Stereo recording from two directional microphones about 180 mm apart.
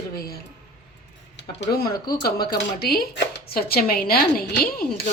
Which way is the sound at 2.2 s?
60° left (ahead or behind).